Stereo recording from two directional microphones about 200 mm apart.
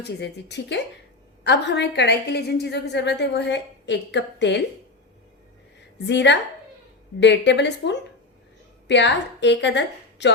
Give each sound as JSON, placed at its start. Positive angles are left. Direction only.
{"t": 0.0, "sound": "a woman's voice", "side_deg": 60}
{"t": 6.1, "sound": "a woman's voice", "side_deg": 60}